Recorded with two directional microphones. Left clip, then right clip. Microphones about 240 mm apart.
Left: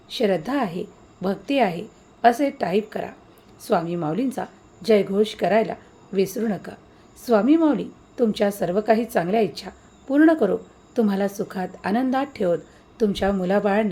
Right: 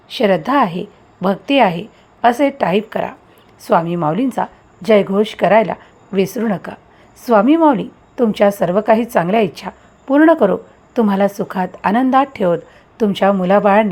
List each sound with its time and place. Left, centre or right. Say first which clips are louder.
0.1 s a woman's voice: right 8 dB; centre